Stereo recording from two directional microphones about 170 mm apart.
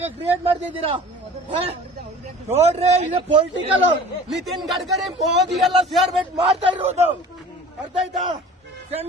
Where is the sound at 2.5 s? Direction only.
40° right (ahead or behind).